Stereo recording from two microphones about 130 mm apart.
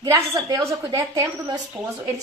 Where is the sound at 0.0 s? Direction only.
30° right (ahead or behind).